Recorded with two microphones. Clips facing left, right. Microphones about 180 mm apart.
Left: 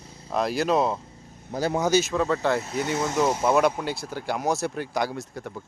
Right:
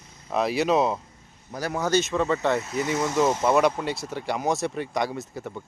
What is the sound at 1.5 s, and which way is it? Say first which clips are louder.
Speech: left 4 dB; 25° left (ahead or behind).